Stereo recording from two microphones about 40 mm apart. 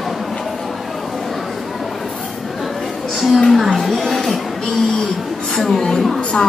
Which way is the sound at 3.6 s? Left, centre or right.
Centre.